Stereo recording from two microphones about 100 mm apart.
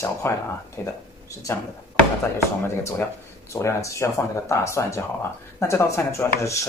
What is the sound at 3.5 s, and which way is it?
Speech, 30° left (ahead or behind).